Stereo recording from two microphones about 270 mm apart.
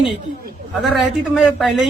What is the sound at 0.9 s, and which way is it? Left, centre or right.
Speech, centre.